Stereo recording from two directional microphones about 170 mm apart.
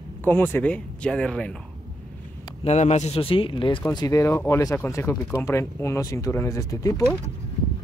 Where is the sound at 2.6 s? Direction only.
40° left (ahead or behind); by 7.0 s 20° left (ahead or behind).